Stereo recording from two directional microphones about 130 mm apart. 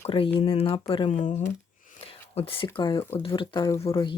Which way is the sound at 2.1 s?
45° left (ahead or behind).